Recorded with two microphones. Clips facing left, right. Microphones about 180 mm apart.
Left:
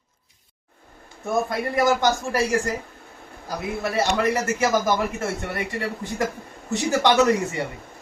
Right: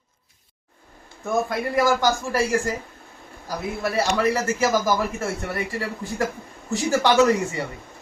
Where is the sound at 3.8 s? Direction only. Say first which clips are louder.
Right 1 dB; 20° left (ahead or behind).